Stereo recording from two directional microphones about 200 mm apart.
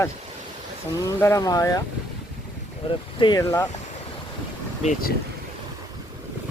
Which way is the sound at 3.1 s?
20° left (ahead or behind).